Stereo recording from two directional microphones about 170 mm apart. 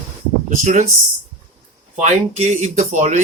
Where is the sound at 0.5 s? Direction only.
50° right (ahead or behind).